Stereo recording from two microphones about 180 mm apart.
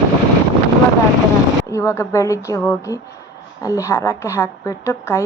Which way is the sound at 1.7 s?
15° left (ahead or behind).